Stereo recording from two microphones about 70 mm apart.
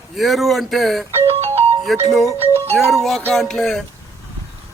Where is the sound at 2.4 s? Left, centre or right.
Right.